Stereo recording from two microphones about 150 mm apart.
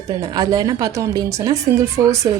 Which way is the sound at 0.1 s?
25° right (ahead or behind).